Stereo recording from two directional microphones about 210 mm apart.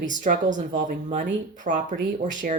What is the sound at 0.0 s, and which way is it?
Speech, 35° right (ahead or behind).